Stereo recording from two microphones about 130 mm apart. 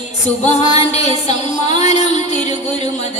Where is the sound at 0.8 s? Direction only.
55° left (ahead or behind).